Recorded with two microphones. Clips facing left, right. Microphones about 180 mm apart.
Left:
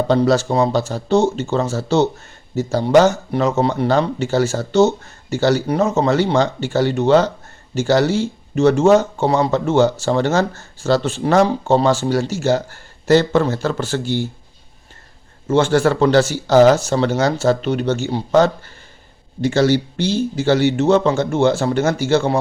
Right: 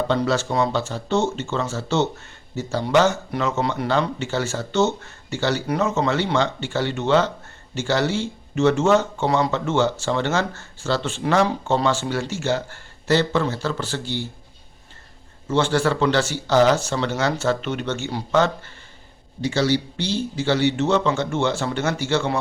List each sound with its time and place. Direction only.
0.1 s speech: 40° left (ahead or behind)
15.4 s speech: 45° left (ahead or behind)
19.4 s speech: 50° left (ahead or behind)